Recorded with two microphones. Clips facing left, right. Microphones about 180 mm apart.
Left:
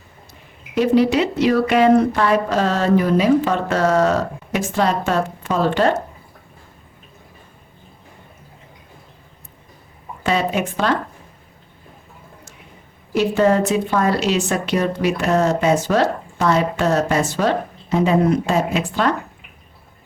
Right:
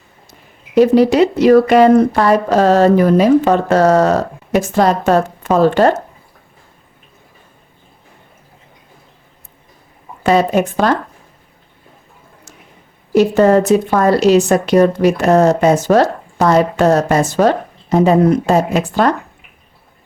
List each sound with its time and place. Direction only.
0.8 s a woman's voice: 40° right (ahead or behind)
10.2 s a woman's voice: 40° right (ahead or behind)
13.1 s a woman's voice: 45° right (ahead or behind)